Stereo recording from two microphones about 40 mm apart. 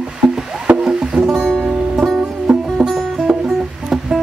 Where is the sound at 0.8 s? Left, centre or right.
Right.